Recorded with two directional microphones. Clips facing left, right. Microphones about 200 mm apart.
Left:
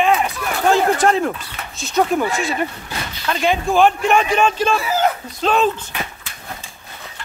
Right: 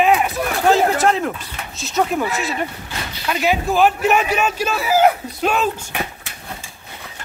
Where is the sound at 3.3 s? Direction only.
5° right (ahead or behind).